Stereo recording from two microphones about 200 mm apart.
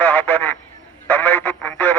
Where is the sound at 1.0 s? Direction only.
10° left (ahead or behind).